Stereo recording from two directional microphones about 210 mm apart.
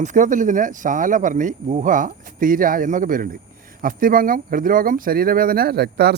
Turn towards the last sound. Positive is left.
turn(degrees=-50)  # may be behind; listen again after turning